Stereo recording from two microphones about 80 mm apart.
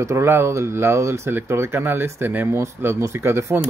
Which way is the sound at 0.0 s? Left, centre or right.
Right.